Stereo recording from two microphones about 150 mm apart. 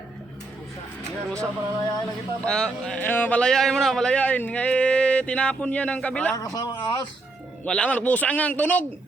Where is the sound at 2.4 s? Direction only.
5° left (ahead or behind).